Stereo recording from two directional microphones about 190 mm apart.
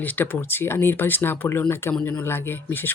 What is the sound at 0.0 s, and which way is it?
Speech, 10° left (ahead or behind).